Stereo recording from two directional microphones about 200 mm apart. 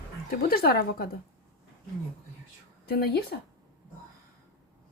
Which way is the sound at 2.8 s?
50° left (ahead or behind).